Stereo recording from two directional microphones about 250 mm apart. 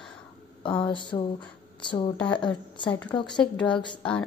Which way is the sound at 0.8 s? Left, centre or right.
Centre.